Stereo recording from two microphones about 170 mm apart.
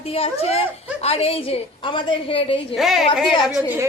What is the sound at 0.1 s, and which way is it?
A woman's voice, 35° left (ahead or behind).